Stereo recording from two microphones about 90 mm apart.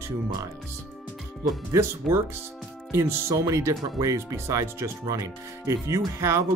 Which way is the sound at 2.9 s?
35° right (ahead or behind).